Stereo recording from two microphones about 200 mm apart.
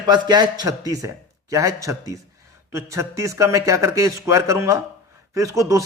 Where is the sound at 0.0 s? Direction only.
20° right (ahead or behind).